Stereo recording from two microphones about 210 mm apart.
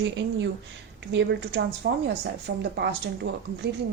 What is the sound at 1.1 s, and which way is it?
A woman's voice, 55° right (ahead or behind).